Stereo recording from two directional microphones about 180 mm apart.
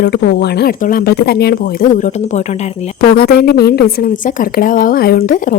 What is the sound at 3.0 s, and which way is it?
Speech, 60° left (ahead or behind).